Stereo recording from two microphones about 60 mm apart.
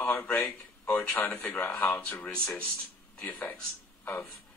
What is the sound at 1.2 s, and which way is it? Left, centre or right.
Speech, left.